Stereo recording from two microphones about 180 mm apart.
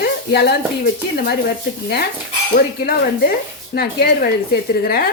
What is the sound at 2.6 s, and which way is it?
Speech, 60° left (ahead or behind).